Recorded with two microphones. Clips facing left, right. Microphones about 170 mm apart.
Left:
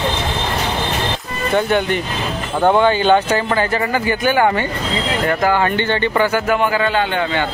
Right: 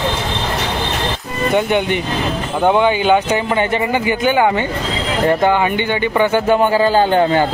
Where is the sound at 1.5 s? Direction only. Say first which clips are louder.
Even; 20° right (ahead or behind).